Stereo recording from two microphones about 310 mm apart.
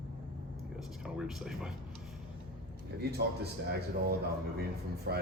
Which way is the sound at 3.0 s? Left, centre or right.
Right.